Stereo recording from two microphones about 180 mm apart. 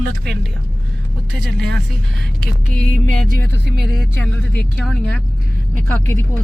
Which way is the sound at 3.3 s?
65° right (ahead or behind).